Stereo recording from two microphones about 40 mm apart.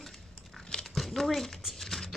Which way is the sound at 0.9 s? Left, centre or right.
Centre.